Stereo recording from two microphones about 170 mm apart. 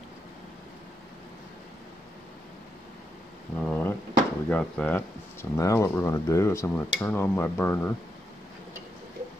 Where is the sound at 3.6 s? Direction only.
10° left (ahead or behind).